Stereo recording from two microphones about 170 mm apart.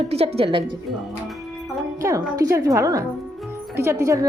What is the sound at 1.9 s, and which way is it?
A woman's voice, 20° right (ahead or behind).